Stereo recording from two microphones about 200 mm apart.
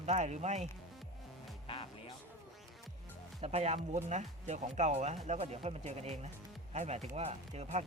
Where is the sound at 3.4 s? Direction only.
30° right (ahead or behind).